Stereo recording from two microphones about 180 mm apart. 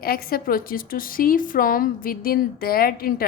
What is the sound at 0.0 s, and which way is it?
A woman's voice, 55° left (ahead or behind).